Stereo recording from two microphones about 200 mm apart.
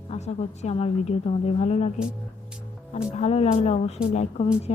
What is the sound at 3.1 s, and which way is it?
A woman's voice, 30° left (ahead or behind).